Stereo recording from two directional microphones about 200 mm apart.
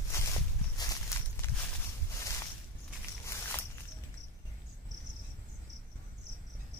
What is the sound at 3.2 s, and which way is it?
Walk, 15° left (ahead or behind).